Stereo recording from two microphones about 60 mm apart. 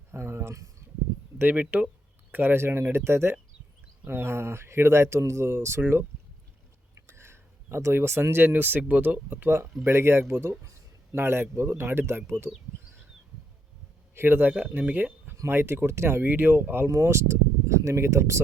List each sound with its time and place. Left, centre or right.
0.1 s a sound: right
1.4 s speech: right
7.1 s speech: right
9.5 s speech: right
14.2 s speech: right
16.9 s speech: right